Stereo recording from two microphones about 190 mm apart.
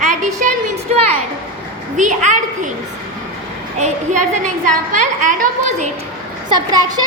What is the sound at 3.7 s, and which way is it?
A woman's voice, 40° right (ahead or behind).